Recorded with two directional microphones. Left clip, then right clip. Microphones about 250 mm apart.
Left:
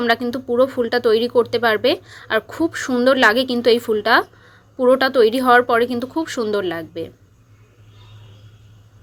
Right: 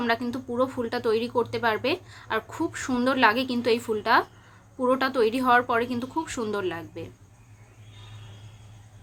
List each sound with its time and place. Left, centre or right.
0.0 s speech: centre